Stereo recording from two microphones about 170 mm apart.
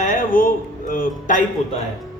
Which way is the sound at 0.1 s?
55° left (ahead or behind).